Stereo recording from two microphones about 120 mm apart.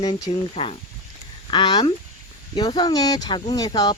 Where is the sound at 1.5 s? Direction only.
40° left (ahead or behind).